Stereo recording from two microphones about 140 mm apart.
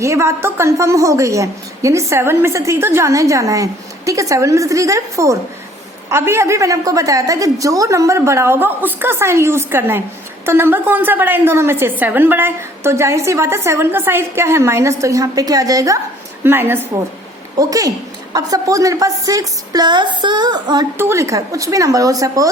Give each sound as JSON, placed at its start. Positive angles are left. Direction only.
{"t": 0.0, "sound": "a woman's voice", "side_deg": -20}
{"t": 21.0, "sound": "a woman's voice", "side_deg": -20}